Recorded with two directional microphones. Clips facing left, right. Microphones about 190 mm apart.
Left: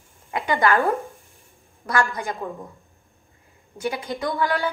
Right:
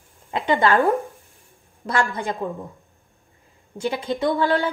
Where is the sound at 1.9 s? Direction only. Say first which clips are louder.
Right 1 dB; 25° right (ahead or behind).